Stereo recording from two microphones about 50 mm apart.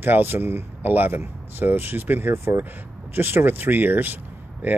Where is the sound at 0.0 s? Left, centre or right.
Right.